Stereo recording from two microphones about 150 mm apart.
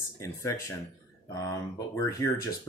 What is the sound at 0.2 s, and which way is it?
Speech, 20° left (ahead or behind).